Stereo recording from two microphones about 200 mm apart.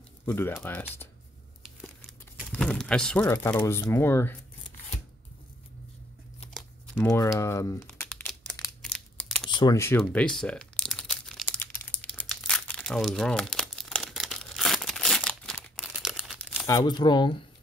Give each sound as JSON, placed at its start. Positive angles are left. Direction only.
{"t": 0.2, "sound": "speech", "side_deg": 10}
{"t": 2.0, "sound": "crumpling", "side_deg": 5}
{"t": 3.4, "sound": "speech", "side_deg": 15}
{"t": 6.5, "sound": "shuffling cards", "side_deg": 5}
{"t": 7.1, "sound": "speech", "side_deg": 15}
{"t": 7.8, "sound": "crumpling", "side_deg": 10}
{"t": 9.5, "sound": "crumpling", "side_deg": 20}
{"t": 16.5, "sound": "speech", "side_deg": 15}